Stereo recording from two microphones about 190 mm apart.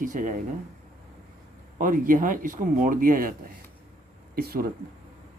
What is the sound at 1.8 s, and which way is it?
Speech, 45° right (ahead or behind).